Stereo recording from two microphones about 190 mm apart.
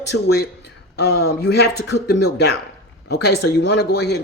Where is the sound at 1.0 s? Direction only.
60° left (ahead or behind).